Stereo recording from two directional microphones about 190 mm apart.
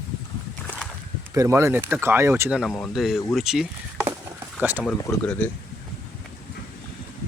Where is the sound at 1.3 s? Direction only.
15° right (ahead or behind).